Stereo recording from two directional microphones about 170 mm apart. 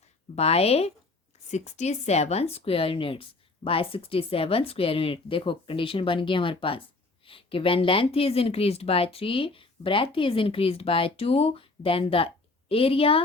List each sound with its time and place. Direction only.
0.3 s speech: 35° left (ahead or behind)